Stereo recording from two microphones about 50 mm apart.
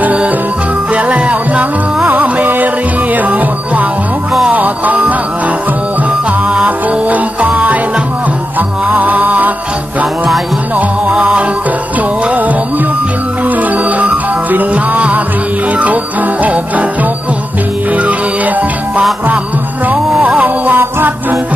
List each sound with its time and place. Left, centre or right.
0.0 s music: right
6.1 s music: right
11.2 s music: right
20.2 s music: right